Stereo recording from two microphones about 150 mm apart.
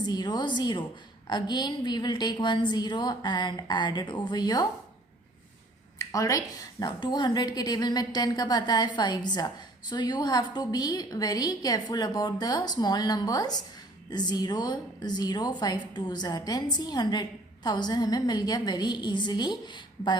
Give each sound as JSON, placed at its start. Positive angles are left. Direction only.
{"t": 0.0, "sound": "a woman's voice", "side_deg": 30}
{"t": 6.0, "sound": "a woman's voice", "side_deg": 20}